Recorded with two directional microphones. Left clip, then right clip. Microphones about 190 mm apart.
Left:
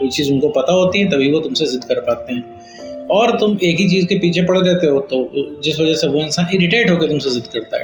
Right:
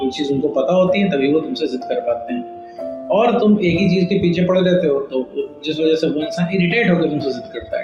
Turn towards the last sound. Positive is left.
turn(degrees=50)  # may be behind; listen again after turning